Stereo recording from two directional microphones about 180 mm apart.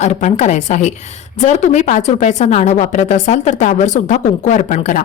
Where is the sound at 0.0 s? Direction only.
40° left (ahead or behind).